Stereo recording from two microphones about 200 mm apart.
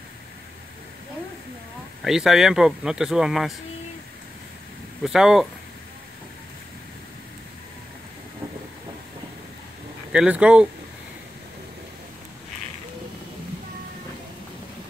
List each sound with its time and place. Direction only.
2.0 s speech: 5° right (ahead or behind)
5.0 s speech: 5° right (ahead or behind)
10.1 s speech: 5° right (ahead or behind)